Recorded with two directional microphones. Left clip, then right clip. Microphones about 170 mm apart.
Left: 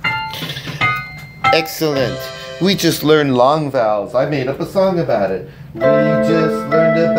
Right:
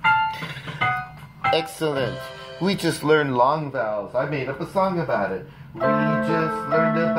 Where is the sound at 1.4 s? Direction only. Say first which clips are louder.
Left 8 dB; 15° left (ahead or behind).